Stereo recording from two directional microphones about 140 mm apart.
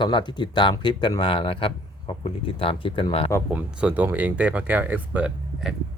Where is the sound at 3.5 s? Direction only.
10° right (ahead or behind).